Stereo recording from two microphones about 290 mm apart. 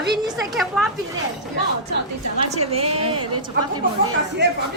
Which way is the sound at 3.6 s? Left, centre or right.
Right.